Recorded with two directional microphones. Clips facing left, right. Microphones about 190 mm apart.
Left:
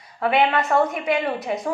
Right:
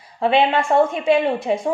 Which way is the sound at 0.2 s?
25° right (ahead or behind).